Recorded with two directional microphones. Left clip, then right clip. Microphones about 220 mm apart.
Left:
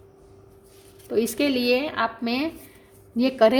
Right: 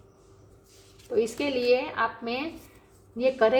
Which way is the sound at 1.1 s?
50° left (ahead or behind).